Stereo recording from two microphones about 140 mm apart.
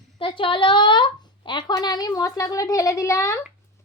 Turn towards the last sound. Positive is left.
turn(degrees=20)  # may be behind; listen again after turning